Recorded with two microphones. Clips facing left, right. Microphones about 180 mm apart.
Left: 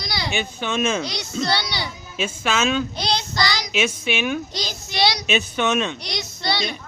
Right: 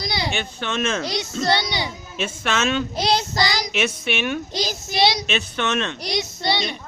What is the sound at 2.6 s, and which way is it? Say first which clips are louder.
Speech: even; 5° right (ahead or behind).